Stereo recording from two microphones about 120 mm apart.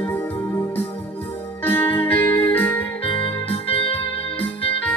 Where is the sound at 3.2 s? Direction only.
50° left (ahead or behind).